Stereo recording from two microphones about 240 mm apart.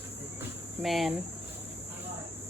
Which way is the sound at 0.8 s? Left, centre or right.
Centre.